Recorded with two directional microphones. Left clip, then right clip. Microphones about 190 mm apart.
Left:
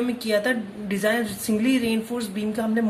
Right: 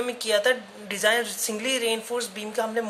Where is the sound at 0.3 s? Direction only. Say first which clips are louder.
Right 1 dB; 25° right (ahead or behind).